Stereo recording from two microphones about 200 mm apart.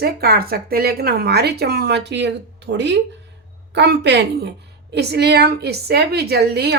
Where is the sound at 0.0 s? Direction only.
50° right (ahead or behind).